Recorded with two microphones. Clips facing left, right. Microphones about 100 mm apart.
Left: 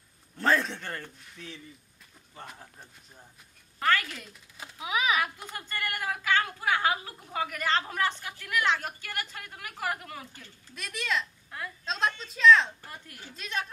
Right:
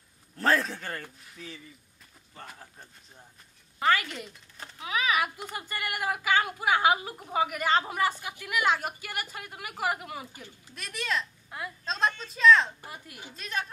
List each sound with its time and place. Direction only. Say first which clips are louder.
0.4 s a woman's voice: even; centre (ahead or behind)
3.8 s a woman's voice: right 1 dB; 5° right (ahead or behind)
4.7 s speech: left 1 dB; 15° left (ahead or behind)
5.1 s a woman's voice: right 1 dB; 5° right (ahead or behind)
10.7 s a woman's voice: even; centre (ahead or behind)